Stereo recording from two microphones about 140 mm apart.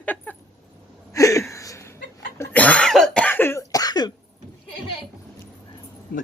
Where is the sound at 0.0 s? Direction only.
10° left (ahead or behind).